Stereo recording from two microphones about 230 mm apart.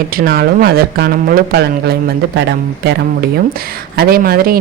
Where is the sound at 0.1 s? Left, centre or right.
Right.